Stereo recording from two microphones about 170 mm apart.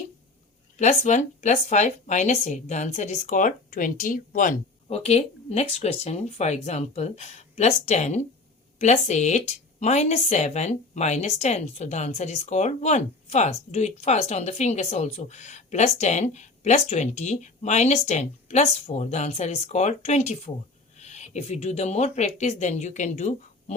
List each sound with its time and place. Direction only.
0.8 s speech: 45° left (ahead or behind)
4.9 s a woman's voice: 40° left (ahead or behind)